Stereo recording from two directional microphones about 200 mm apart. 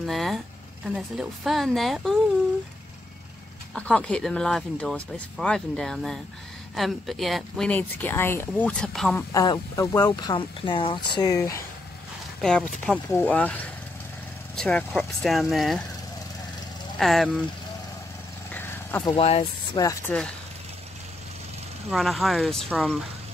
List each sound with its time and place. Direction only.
0.0 s speech: centre (ahead or behind)
3.7 s speech: 5° left (ahead or behind)
9.1 s speech: 20° left (ahead or behind)
12.4 s speech: centre (ahead or behind)
17.0 s speech: centre (ahead or behind)
18.5 s vehicle: 10° left (ahead or behind)
19.1 s speech: 30° left (ahead or behind)
19.8 s speech: 15° left (ahead or behind)
21.9 s speech: centre (ahead or behind)